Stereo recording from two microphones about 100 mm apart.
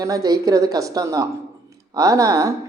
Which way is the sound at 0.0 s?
40° right (ahead or behind).